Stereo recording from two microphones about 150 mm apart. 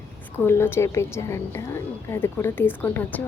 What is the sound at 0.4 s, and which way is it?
A woman's voice, 15° left (ahead or behind).